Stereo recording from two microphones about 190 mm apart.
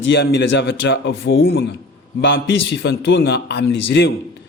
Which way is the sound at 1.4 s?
55° left (ahead or behind).